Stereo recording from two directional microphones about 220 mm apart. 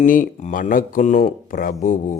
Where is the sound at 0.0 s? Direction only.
35° left (ahead or behind).